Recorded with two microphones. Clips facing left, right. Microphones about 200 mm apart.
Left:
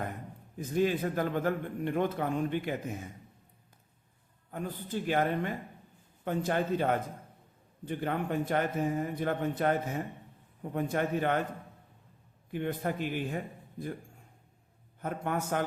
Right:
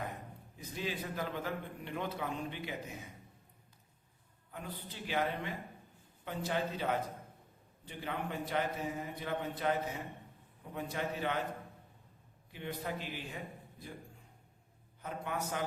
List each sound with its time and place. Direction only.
0.5 s a man's voice: 50° left (ahead or behind)
4.5 s a man's voice: 45° left (ahead or behind)
12.5 s a man's voice: 50° left (ahead or behind)
15.0 s a man's voice: 55° left (ahead or behind)